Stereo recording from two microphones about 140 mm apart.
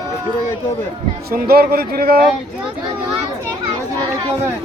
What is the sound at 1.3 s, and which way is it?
Speech, 90° right.